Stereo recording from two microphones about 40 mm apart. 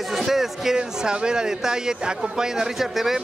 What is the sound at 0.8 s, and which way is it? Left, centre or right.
A man's voice, centre.